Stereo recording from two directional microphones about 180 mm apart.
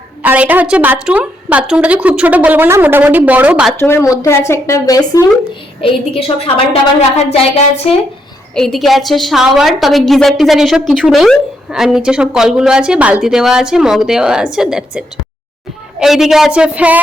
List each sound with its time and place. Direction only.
0.2 s a woman's voice: 10° right (ahead or behind)
3.8 s speech: 15° left (ahead or behind)
5.8 s a woman's voice: 30° left (ahead or behind)
8.5 s a woman's voice: centre (ahead or behind)